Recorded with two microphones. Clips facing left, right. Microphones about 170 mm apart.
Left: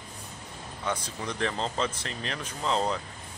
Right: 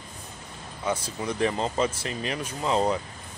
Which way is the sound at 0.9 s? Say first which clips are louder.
Right 4 dB; 10° right (ahead or behind).